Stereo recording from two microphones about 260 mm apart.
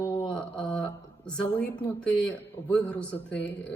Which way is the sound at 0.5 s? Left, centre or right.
Centre.